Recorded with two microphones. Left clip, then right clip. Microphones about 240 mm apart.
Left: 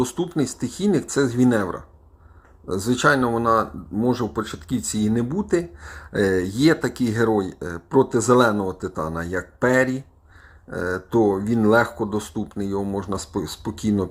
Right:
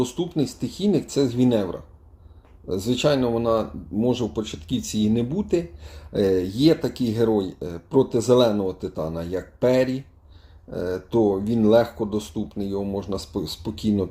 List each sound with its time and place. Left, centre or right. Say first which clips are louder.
0.2 s speech: left 1 dB; centre